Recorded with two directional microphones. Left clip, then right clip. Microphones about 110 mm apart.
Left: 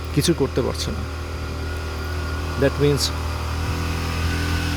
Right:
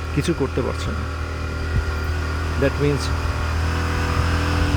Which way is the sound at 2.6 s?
35° left (ahead or behind).